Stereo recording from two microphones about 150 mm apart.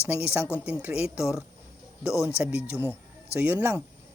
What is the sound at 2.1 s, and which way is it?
Speech, 20° left (ahead or behind).